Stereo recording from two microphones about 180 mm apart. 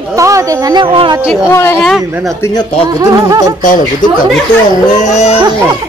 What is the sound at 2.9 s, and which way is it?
Speech, 20° right (ahead or behind).